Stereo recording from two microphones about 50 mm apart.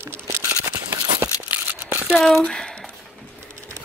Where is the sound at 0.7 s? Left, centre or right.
Right.